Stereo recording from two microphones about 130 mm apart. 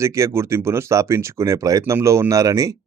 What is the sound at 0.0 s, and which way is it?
Speech, 25° right (ahead or behind).